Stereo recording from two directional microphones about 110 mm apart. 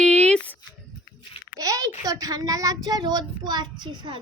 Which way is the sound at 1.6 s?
30° right (ahead or behind).